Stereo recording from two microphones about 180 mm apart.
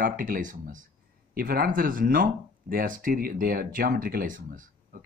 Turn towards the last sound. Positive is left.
turn(degrees=-50)  # may be behind; listen again after turning